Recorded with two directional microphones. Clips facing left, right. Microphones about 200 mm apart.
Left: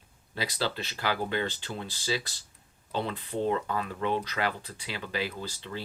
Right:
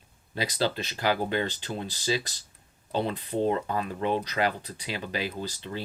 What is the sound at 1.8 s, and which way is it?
Speech, 40° right (ahead or behind).